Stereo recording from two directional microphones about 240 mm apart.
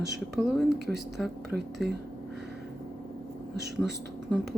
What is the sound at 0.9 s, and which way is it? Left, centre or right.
Speech, centre.